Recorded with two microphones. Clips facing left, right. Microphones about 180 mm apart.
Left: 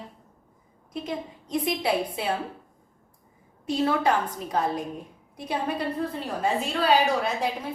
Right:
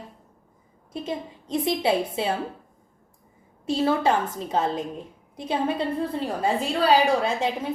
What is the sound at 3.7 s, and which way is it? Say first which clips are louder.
A woman's voice: right 2 dB; 25° right (ahead or behind).